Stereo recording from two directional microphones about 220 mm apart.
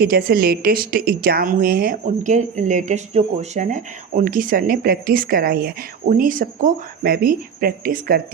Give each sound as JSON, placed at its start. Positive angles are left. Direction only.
{"t": 0.0, "sound": "a woman's voice", "side_deg": -45}